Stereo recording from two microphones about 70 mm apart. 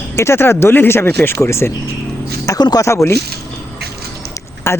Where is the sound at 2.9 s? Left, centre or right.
Left.